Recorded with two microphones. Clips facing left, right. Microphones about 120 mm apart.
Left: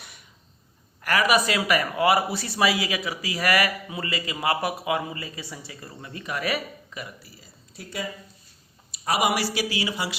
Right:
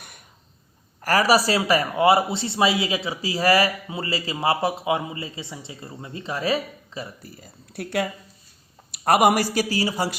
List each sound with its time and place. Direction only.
1.0 s speech: 35° right (ahead or behind)
7.2 s speech: 50° right (ahead or behind)
8.9 s speech: 55° right (ahead or behind)